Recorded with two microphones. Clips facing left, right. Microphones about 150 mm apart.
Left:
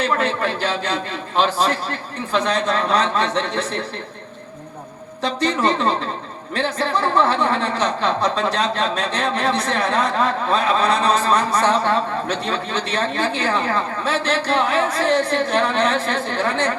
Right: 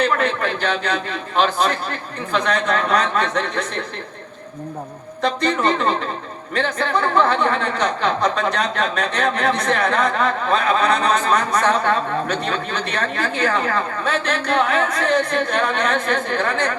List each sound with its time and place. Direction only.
0.0 s speech: 30° left (ahead or behind)
5.4 s speech: 30° left (ahead or behind)